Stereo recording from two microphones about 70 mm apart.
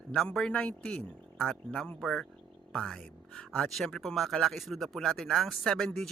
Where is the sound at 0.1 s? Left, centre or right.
Centre.